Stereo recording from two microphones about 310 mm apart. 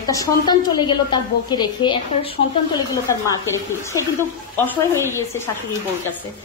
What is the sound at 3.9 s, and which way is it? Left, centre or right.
A woman's voice, centre.